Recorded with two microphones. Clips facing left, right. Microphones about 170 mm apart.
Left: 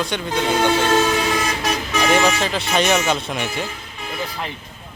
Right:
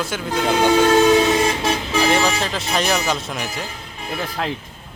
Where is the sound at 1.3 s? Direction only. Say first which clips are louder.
Right 3 dB; 25° right (ahead or behind).